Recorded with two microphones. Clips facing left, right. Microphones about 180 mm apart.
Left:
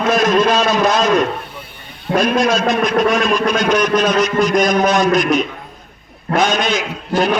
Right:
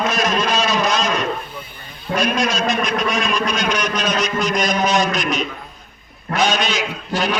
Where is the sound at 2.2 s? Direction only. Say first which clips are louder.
Left 5 dB; 55° left (ahead or behind).